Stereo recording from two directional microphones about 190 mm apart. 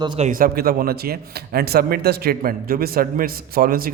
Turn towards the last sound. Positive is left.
turn(degrees=-50)  # may be behind; listen again after turning